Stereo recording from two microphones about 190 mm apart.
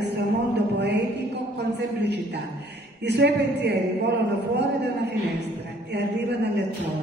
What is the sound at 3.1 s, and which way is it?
Speech, 60° right (ahead or behind).